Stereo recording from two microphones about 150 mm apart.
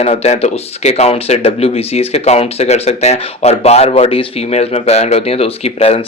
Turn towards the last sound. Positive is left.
turn(degrees=40)  # may be behind; listen again after turning